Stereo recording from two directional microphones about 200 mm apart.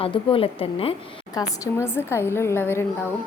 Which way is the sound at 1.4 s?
15° left (ahead or behind).